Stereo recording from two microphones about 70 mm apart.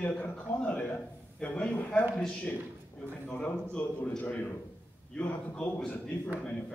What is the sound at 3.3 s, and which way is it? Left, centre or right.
A man's voice, left.